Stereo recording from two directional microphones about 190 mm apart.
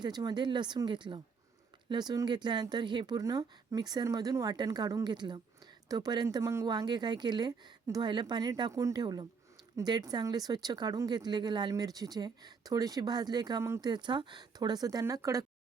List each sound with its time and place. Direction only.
0.0 s speech: 20° right (ahead or behind)